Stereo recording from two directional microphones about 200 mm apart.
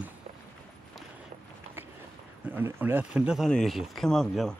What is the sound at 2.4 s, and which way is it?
Speech, 10° right (ahead or behind).